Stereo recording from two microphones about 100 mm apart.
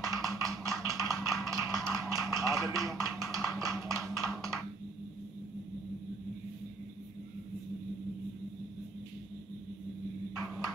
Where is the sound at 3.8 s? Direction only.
30° right (ahead or behind).